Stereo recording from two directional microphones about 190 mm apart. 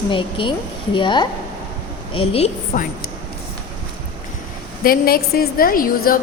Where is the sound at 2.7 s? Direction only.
45° left (ahead or behind).